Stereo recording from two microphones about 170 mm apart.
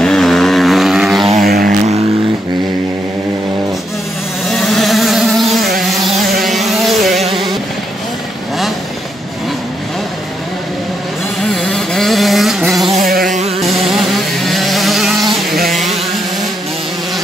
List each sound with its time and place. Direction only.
0.0 s vehicle: centre (ahead or behind)
1.4 s vehicle: 60° right (ahead or behind)
4.5 s vehicle: centre (ahead or behind)
11.4 s vehicle: centre (ahead or behind)
13.3 s music: 40° right (ahead or behind)
13.7 s vehicle: centre (ahead or behind)
15.7 s a sound: centre (ahead or behind)